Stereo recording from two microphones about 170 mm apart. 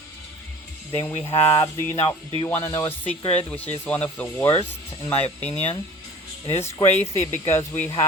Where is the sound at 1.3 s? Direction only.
30° left (ahead or behind).